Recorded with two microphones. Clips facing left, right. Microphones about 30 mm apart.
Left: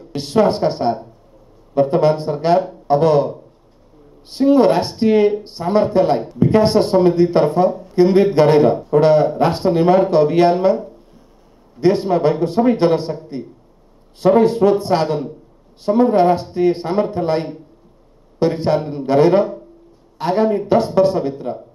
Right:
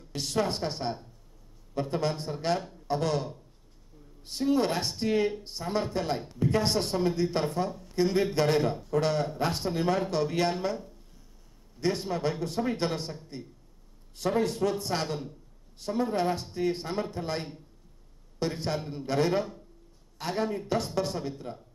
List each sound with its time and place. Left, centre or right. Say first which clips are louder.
0.0 s speech: left 14 dB; left